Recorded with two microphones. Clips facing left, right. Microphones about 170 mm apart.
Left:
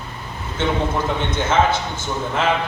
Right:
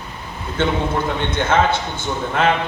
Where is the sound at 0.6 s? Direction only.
60° right (ahead or behind).